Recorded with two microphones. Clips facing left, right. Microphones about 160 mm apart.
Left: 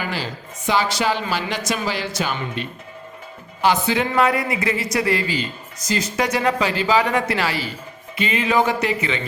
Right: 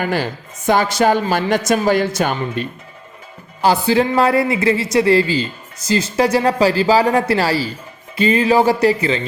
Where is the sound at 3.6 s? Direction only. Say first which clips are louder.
Right 4 dB; 30° right (ahead or behind).